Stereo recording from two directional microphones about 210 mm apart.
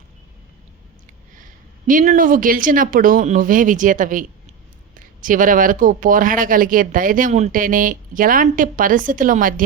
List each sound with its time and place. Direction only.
1.9 s speech: 40° right (ahead or behind)